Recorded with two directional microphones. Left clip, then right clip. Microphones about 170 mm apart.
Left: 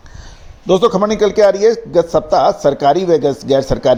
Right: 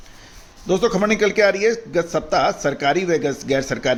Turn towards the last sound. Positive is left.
turn(degrees=20)  # may be behind; listen again after turning